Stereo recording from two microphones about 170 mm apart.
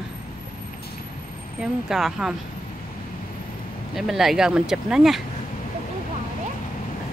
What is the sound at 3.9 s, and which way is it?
Speech, centre (ahead or behind).